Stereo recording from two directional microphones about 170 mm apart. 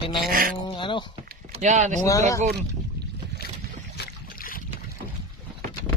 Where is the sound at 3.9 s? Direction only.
65° left (ahead or behind).